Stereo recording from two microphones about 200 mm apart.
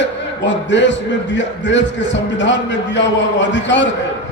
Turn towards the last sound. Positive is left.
turn(degrees=60)  # may be behind; listen again after turning